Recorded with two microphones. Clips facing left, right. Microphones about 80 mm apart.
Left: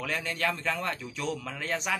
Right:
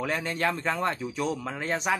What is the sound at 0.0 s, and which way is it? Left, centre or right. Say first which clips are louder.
Speech: right 3 dB; right.